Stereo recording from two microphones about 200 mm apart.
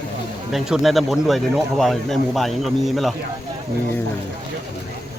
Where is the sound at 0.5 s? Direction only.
Centre (ahead or behind).